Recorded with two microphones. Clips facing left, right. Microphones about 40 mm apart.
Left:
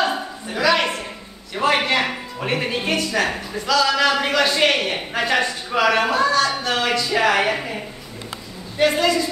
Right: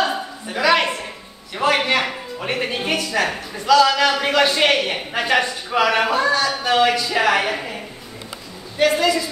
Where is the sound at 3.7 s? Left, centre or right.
Centre.